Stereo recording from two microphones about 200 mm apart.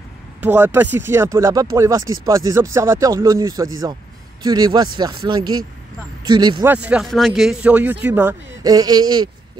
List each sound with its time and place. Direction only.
0.4 s speech: 10° right (ahead or behind)
6.6 s speech: 10° right (ahead or behind)